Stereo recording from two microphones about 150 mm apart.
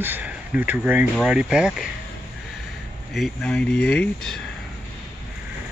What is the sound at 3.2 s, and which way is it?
Speech, centre (ahead or behind).